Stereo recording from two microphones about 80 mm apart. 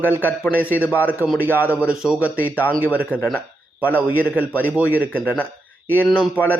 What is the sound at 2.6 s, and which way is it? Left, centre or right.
Speech, left.